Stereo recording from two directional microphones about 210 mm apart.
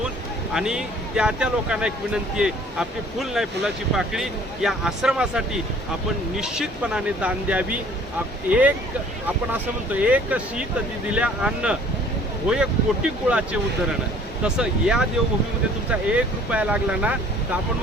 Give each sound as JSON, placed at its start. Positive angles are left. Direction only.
{"t": 0.5, "sound": "speech", "side_deg": -5}
{"t": 13.2, "sound": "speech", "side_deg": -5}